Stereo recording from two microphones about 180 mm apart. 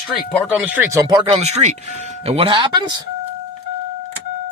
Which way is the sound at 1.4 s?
40° right (ahead or behind).